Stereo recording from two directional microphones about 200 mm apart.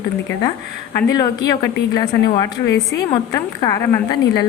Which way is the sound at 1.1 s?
20° left (ahead or behind).